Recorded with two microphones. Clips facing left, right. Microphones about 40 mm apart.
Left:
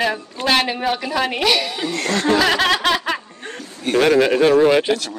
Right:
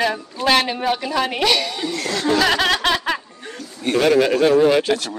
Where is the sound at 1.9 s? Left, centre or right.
Left.